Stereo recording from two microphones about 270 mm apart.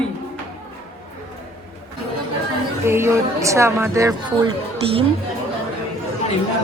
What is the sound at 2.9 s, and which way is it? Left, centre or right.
A woman's voice, centre.